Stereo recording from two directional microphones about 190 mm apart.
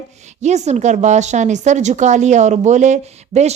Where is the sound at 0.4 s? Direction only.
35° right (ahead or behind).